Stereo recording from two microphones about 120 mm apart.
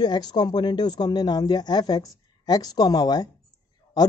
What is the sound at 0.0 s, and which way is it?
Speech, 35° left (ahead or behind).